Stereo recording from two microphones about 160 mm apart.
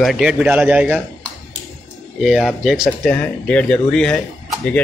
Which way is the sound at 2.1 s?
Centre (ahead or behind).